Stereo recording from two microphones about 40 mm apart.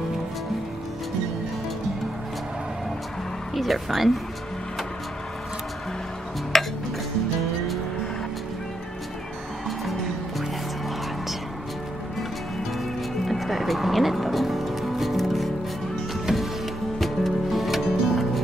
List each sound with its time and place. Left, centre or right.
3.5 s speech: centre
6.5 s a sound: centre
13.2 s music: centre
16.3 s music: centre
17.0 s music: centre